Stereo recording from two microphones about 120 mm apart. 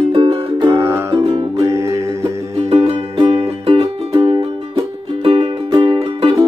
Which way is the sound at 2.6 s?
55° right (ahead or behind).